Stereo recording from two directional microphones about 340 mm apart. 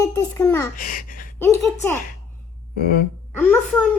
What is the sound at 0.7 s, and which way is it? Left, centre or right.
Speech, left.